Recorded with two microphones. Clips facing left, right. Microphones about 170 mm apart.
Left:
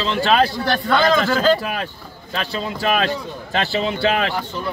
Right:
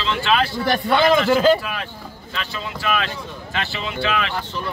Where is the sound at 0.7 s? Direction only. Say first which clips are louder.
Right 2 dB; 15° right (ahead or behind).